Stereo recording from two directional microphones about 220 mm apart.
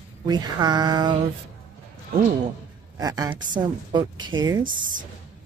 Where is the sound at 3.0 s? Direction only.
15° right (ahead or behind).